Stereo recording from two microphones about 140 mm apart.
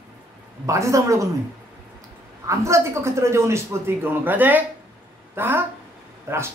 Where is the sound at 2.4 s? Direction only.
20° right (ahead or behind).